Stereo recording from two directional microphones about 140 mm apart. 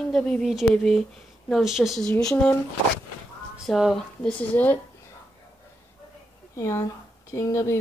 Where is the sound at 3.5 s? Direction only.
Centre (ahead or behind).